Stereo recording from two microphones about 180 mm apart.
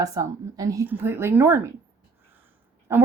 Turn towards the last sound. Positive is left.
turn(degrees=-15)  # may be behind; listen again after turning